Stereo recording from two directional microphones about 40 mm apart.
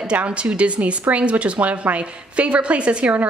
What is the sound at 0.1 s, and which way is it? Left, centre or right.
Speech, right.